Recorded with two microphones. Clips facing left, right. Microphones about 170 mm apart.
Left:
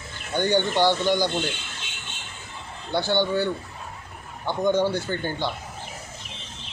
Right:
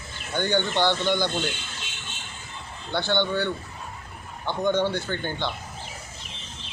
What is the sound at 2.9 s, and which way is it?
Speech, 10° left (ahead or behind).